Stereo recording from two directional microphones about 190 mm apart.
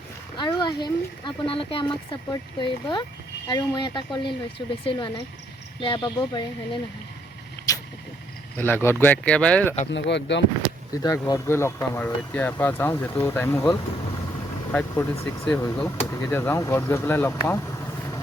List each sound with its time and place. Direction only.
0.3 s speech: 25° left (ahead or behind)
7.7 s vehicle: 20° left (ahead or behind)
8.5 s speech: 10° left (ahead or behind)
9.9 s speech: 65° left (ahead or behind)
10.9 s speech: 20° left (ahead or behind)
14.7 s speech: 10° left (ahead or behind)